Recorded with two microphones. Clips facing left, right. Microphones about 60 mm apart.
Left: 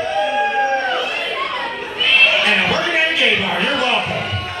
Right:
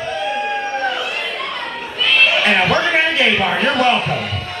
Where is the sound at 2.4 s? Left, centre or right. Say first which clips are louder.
Right 2 dB; right.